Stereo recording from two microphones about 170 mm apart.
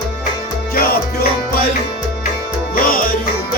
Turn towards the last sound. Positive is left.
turn(degrees=60)  # may be behind; listen again after turning